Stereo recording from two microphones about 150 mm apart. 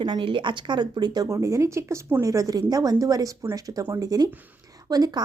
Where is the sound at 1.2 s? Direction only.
20° right (ahead or behind).